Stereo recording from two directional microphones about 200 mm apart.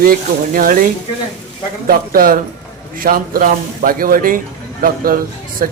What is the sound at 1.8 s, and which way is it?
A man's voice, 45° right (ahead or behind).